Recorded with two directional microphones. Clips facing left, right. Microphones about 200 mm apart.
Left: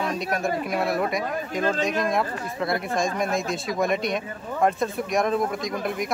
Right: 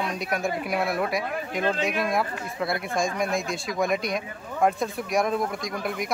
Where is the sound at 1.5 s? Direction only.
45° left (ahead or behind).